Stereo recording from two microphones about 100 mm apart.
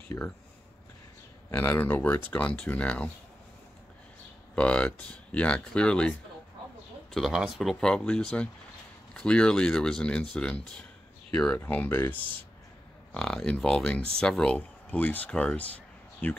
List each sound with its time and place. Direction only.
0.1 s speech: 25° left (ahead or behind)
1.5 s speech: 20° left (ahead or behind)
4.6 s speech: 10° left (ahead or behind)
7.1 s speech: centre (ahead or behind)
7.8 s speech: 10° left (ahead or behind)
13.1 s speech: 5° left (ahead or behind)